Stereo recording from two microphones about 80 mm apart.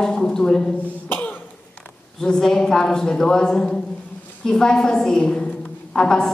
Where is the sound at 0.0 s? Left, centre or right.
Centre.